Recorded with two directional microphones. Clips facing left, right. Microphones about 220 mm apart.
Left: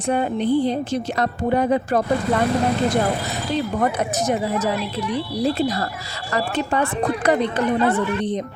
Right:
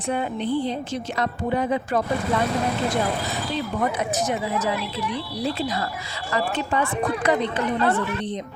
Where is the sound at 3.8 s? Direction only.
45° left (ahead or behind).